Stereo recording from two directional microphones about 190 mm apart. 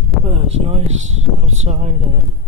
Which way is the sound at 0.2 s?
30° right (ahead or behind).